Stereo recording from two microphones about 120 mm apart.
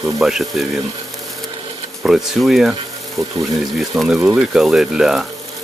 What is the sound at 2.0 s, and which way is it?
Speech, centre (ahead or behind).